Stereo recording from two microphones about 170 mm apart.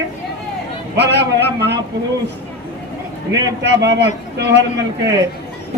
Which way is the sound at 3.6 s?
90° right.